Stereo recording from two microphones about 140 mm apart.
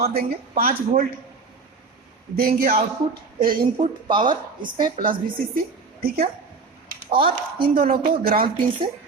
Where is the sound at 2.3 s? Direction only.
90° right.